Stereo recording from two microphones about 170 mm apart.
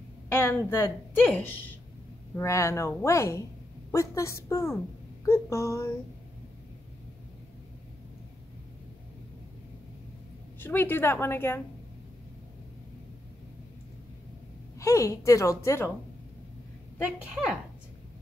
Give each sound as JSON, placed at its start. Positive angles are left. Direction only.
{"t": 0.3, "sound": "a woman's voice", "side_deg": 15}
{"t": 10.6, "sound": "a woman's voice", "side_deg": 10}
{"t": 14.8, "sound": "a woman's voice", "side_deg": 20}